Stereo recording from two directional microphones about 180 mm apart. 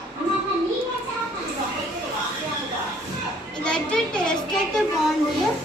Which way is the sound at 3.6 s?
5° left (ahead or behind).